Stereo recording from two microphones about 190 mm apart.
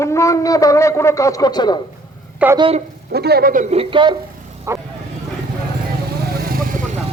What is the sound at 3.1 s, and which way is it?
Speech, 55° right (ahead or behind).